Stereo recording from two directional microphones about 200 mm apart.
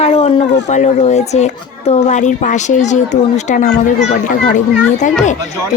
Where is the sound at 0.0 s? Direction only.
30° left (ahead or behind).